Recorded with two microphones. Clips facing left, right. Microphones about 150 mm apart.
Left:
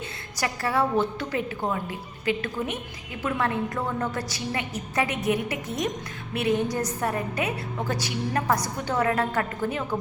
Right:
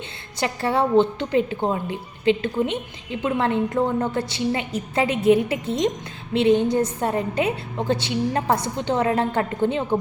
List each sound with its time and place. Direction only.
0.3 s a woman's voice: 25° right (ahead or behind)